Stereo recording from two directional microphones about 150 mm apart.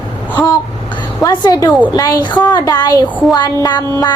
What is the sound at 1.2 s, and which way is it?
A woman's voice, 25° left (ahead or behind).